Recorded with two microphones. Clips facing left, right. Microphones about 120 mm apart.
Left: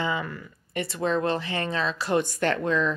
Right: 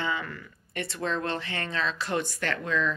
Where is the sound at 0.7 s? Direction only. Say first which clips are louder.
Left 5 dB; 5° left (ahead or behind).